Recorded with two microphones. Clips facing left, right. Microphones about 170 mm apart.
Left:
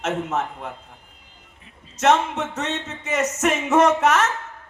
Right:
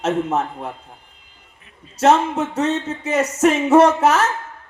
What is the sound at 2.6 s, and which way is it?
A man's voice, 30° right (ahead or behind).